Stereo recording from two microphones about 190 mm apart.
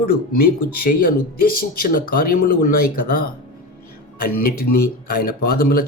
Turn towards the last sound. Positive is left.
turn(degrees=50)  # may be behind; listen again after turning